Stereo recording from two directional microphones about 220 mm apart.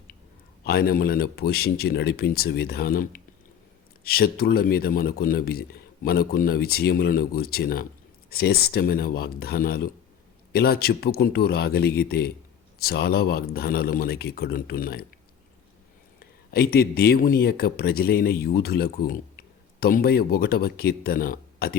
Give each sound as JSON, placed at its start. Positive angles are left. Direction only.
{"t": 0.6, "sound": "speech", "side_deg": 45}
{"t": 16.5, "sound": "speech", "side_deg": 45}